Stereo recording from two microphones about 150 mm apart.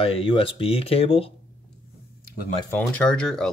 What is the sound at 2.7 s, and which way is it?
Speech, 10° left (ahead or behind).